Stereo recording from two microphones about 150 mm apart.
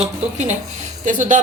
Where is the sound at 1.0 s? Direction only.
55° right (ahead or behind).